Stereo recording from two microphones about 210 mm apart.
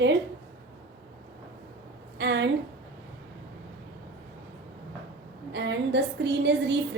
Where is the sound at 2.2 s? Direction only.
55° right (ahead or behind).